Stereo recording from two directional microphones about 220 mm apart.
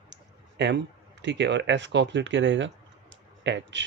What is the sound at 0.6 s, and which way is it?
Speech, 55° right (ahead or behind).